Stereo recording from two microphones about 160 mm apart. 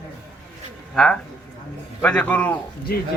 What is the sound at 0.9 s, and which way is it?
Speech, 5° left (ahead or behind).